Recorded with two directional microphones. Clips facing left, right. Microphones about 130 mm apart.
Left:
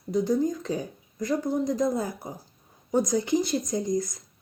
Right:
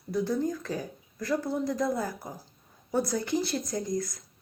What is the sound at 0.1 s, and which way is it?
Speech, 20° left (ahead or behind).